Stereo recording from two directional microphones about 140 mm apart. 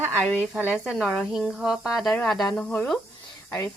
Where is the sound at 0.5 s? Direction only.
10° right (ahead or behind).